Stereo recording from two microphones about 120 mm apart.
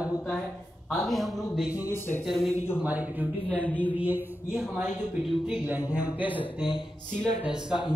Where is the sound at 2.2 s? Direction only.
Centre (ahead or behind).